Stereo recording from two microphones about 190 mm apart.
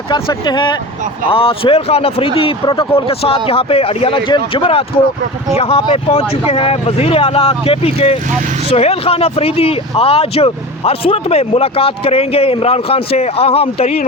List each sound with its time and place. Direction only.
0.1 s speech: 25° left (ahead or behind)